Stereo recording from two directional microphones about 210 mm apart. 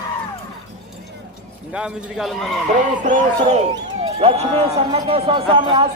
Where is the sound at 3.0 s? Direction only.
35° right (ahead or behind).